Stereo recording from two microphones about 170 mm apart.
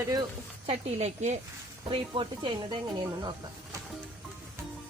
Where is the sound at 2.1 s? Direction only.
30° right (ahead or behind).